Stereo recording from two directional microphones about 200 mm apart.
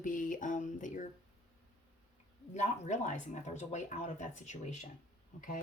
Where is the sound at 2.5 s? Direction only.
35° left (ahead or behind).